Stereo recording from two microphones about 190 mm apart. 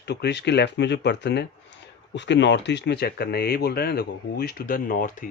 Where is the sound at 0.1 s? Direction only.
65° left (ahead or behind).